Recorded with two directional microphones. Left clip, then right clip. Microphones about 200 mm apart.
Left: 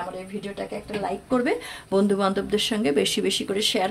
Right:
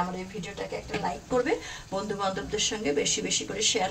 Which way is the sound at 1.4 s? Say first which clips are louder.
Left 3 dB; 55° left (ahead or behind).